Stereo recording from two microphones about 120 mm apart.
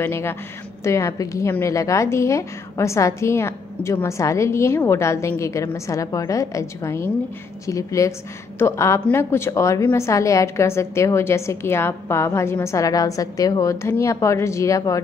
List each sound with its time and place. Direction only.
0.0 s a woman's voice: 20° left (ahead or behind)